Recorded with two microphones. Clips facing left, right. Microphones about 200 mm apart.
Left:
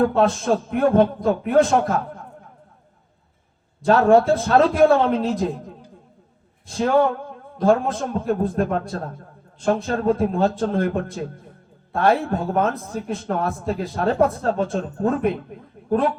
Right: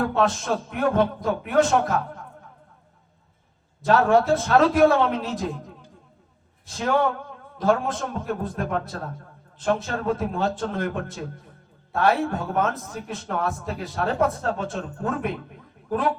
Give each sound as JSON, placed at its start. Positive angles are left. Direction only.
{"t": 0.2, "sound": "a man's voice", "side_deg": 35}
{"t": 3.8, "sound": "a man's voice", "side_deg": 30}